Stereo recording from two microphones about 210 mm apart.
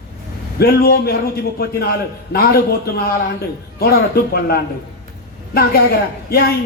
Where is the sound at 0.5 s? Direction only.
45° left (ahead or behind).